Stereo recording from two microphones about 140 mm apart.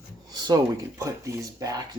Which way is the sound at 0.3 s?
30° right (ahead or behind).